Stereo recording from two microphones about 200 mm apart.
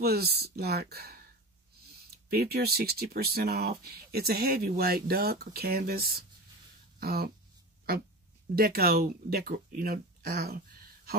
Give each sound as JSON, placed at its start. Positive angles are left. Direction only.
{"t": 0.0, "sound": "speech", "side_deg": -50}
{"t": 2.2, "sound": "speech", "side_deg": -50}
{"t": 8.5, "sound": "speech", "side_deg": -50}